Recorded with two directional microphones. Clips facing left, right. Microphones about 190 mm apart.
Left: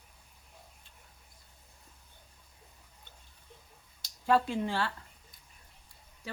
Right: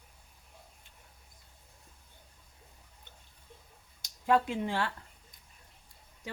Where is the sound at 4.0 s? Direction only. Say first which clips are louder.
Even; 15° right (ahead or behind).